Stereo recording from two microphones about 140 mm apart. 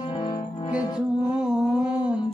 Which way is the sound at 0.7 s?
5° right (ahead or behind).